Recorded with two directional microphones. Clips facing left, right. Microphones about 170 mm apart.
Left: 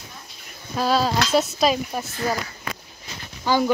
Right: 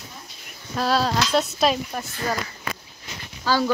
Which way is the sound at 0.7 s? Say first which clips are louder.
Left 1 dB; centre (ahead or behind).